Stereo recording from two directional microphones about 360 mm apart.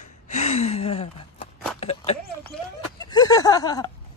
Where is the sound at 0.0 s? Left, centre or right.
Centre.